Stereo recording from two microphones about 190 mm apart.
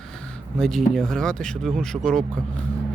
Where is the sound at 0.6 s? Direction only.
Centre (ahead or behind).